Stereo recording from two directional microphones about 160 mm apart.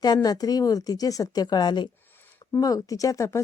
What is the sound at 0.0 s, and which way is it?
Speech, 25° left (ahead or behind).